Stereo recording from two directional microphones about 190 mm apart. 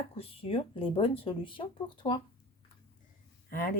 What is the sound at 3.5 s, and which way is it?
Speech, 45° left (ahead or behind).